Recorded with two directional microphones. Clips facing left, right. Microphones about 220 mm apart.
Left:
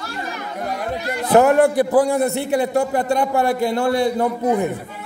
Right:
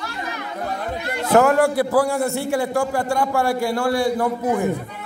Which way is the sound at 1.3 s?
20° left (ahead or behind).